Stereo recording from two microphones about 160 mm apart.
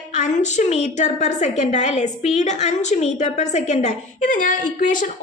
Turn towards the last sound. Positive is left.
turn(degrees=55)  # may be behind; listen again after turning